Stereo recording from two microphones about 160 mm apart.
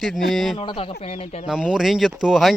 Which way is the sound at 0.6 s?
35° left (ahead or behind).